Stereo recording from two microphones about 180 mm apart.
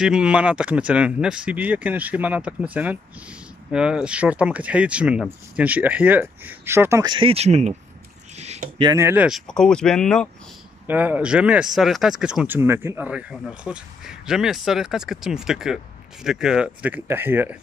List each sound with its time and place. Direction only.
0.0 s speech: 5° right (ahead or behind)
7.1 s speech: 30° right (ahead or behind)
8.4 s a sound: 40° right (ahead or behind)
8.8 s speech: 15° right (ahead or behind)
9.5 s speech: 5° left (ahead or behind)
10.9 s speech: 10° right (ahead or behind)